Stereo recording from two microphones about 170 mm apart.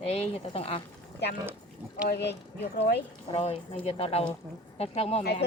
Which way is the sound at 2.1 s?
80° left.